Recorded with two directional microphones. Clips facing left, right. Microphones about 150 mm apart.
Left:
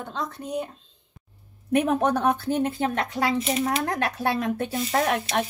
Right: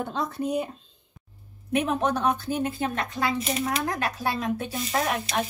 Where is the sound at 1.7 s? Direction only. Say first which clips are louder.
Left 3 dB; 50° left (ahead or behind).